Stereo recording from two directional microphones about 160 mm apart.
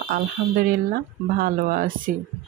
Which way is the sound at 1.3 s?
65° right (ahead or behind).